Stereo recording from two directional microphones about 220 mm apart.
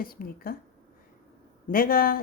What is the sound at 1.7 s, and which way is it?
Speech, 40° left (ahead or behind).